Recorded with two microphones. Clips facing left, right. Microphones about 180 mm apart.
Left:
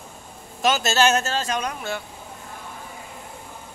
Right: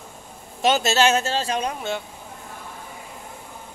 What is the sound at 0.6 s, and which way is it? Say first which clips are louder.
Speech: right 1 dB; 30° right (ahead or behind).